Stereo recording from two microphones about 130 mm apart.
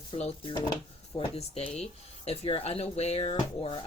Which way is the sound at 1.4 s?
55° left (ahead or behind).